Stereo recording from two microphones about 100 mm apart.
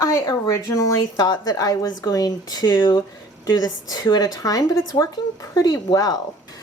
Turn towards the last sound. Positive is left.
turn(degrees=40)  # may be behind; listen again after turning